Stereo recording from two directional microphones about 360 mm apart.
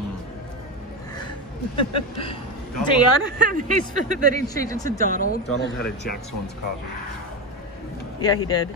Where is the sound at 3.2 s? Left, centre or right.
Left.